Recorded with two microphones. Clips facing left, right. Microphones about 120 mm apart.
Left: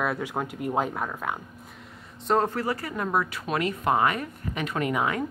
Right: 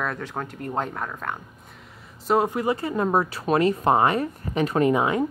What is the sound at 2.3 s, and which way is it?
Speech, 10° right (ahead or behind).